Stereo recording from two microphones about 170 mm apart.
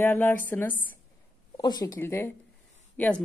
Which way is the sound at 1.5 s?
25° left (ahead or behind).